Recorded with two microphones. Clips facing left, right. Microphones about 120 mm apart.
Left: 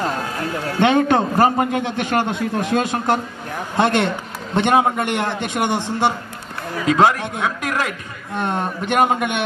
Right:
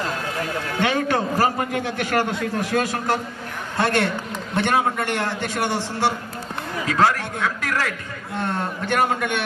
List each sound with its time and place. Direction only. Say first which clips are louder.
0.7 s a man's voice: left 6 dB; 25° left (ahead or behind)